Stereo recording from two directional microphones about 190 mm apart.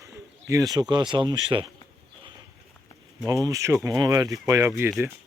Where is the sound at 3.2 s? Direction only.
15° right (ahead or behind).